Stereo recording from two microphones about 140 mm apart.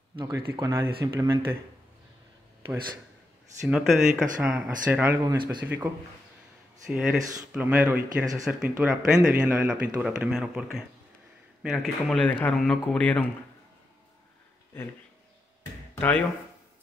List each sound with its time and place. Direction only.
0.3 s speech: 20° right (ahead or behind)
3.6 s speech: 5° right (ahead or behind)
5.2 s speech: 30° right (ahead or behind)
5.8 s speech: 15° right (ahead or behind); by 13.3 s 10° left (ahead or behind)